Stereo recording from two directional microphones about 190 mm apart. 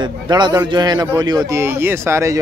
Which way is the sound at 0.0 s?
20° right (ahead or behind).